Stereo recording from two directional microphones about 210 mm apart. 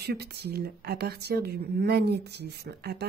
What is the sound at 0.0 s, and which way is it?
Speech, 50° right (ahead or behind).